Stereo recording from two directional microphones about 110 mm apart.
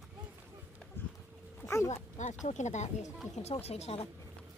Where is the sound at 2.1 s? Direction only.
90° left.